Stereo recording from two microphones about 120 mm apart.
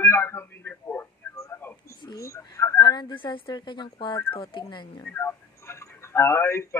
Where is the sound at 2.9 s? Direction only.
40° left (ahead or behind).